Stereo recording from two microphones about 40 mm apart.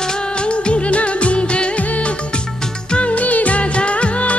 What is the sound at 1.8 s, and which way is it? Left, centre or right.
Music, left.